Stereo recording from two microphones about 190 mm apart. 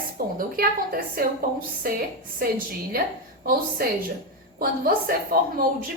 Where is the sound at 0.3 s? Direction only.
50° right (ahead or behind).